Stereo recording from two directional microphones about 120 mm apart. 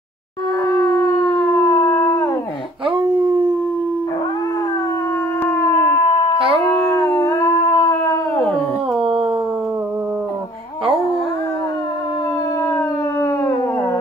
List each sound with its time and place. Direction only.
0.7 s howl: 20° left (ahead or behind)
2.9 s dog: 45° right (ahead or behind)
5.4 s howl: 15° left (ahead or behind)
6.3 s a sound: 50° right (ahead or behind)
7.1 s howl: 25° left (ahead or behind)
8.9 s dog: 50° right (ahead or behind)
12.7 s howl: 15° left (ahead or behind)